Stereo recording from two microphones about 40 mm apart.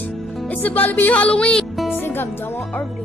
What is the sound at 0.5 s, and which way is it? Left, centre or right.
Speech, left.